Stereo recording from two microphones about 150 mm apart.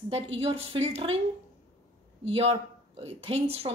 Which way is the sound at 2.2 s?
40° right (ahead or behind).